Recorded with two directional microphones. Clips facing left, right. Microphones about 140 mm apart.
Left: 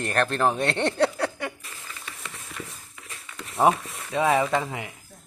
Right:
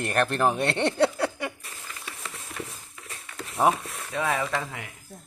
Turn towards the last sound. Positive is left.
turn(degrees=15)  # may be behind; listen again after turning